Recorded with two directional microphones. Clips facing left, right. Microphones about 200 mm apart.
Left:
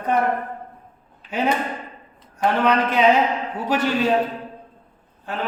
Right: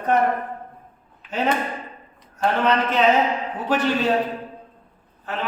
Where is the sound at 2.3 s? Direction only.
10° left (ahead or behind).